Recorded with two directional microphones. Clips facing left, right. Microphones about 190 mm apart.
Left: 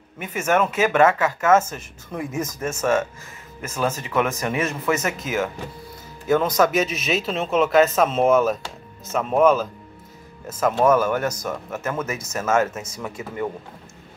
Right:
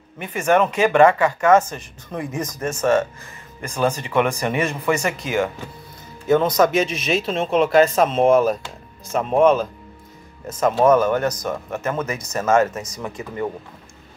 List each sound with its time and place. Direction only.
0.2 s speech: 5° left (ahead or behind)
6.6 s speech: 5° left (ahead or behind)